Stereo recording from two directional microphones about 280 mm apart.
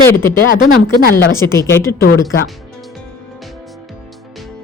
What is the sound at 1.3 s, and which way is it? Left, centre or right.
Speech, centre.